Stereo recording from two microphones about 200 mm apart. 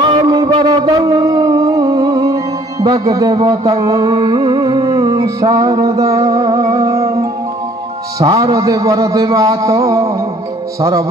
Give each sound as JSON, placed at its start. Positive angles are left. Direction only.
{"t": 0.0, "sound": "a sound", "side_deg": -20}
{"t": 0.5, "sound": "music", "side_deg": -20}
{"t": 8.2, "sound": "a man's voice", "side_deg": -15}